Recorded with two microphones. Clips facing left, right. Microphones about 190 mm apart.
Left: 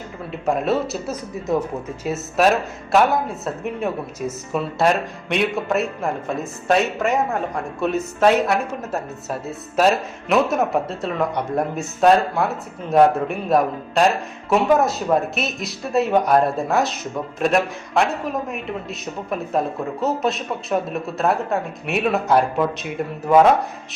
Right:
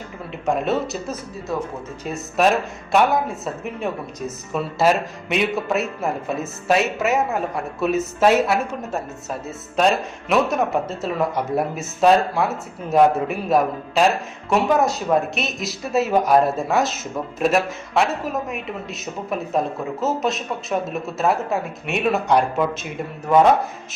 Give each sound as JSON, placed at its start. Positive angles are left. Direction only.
{"t": 0.4, "sound": "speech", "side_deg": 0}
{"t": 1.5, "sound": "speech", "side_deg": 20}
{"t": 2.0, "sound": "speech", "side_deg": 0}